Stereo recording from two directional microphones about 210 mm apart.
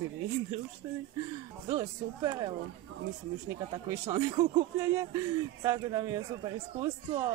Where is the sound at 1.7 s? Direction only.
20° right (ahead or behind).